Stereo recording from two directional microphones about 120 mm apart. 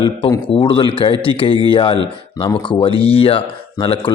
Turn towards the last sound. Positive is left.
turn(degrees=50)  # may be behind; listen again after turning